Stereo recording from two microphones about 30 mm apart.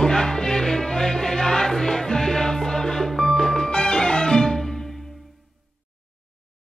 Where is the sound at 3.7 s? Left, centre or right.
Left.